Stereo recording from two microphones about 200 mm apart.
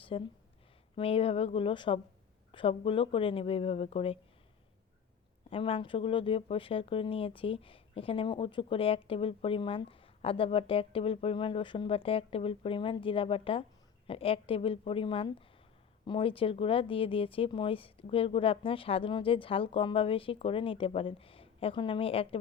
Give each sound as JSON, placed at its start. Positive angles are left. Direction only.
{"t": 0.0, "sound": "speech", "side_deg": 25}
{"t": 5.5, "sound": "speech", "side_deg": 25}